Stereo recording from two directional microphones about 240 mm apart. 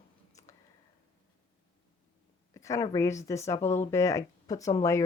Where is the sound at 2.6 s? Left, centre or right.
Centre.